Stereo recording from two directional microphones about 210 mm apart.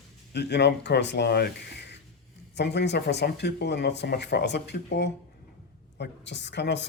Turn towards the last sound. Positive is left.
turn(degrees=55)  # may be behind; listen again after turning